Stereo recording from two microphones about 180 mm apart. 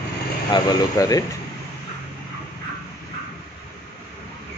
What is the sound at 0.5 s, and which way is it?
Speech, 20° left (ahead or behind).